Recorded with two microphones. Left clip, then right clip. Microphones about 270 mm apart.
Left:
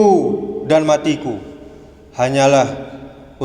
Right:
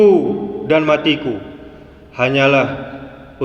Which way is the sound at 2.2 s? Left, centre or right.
Centre.